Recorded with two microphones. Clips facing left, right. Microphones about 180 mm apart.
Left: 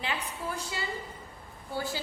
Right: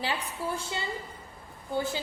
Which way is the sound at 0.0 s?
30° right (ahead or behind).